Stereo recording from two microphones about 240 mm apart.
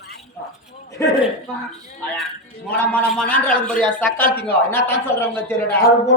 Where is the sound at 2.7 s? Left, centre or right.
Centre.